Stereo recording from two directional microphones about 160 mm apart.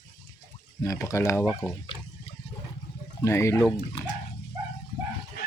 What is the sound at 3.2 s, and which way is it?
Speech, 15° left (ahead or behind).